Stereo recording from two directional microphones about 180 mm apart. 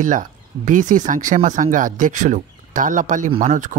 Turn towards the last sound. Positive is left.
turn(degrees=-45)  # may be behind; listen again after turning